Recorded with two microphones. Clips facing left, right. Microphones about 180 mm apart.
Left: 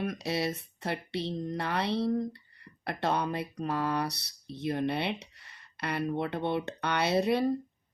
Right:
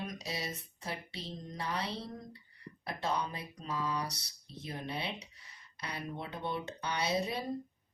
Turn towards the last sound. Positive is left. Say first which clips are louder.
# left 7 dB
turn(degrees=65)  # may be behind; listen again after turning